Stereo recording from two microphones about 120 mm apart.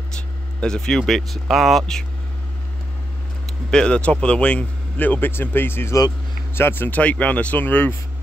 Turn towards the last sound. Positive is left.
turn(degrees=15)  # may be behind; listen again after turning